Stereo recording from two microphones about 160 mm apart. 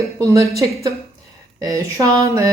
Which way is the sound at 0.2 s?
20° right (ahead or behind).